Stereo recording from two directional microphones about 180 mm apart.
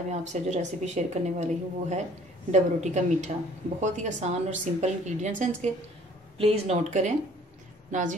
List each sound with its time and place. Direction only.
0.1 s speech: 40° right (ahead or behind)